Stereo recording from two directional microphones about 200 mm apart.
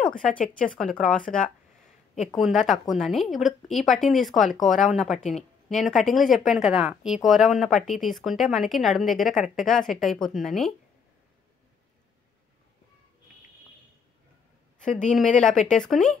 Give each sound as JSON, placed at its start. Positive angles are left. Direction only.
{"t": 0.6, "sound": "a woman's voice", "side_deg": 5}
{"t": 2.3, "sound": "a woman's voice", "side_deg": 0}
{"t": 14.8, "sound": "a woman's voice", "side_deg": 40}
{"t": 15.1, "sound": "a woman's voice", "side_deg": 5}